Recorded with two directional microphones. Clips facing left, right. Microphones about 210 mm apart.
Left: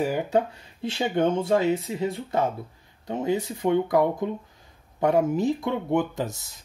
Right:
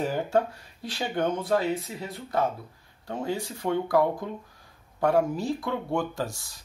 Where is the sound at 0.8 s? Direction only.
25° left (ahead or behind).